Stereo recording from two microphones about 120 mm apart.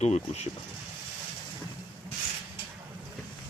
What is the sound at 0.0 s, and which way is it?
Speech, 65° left (ahead or behind).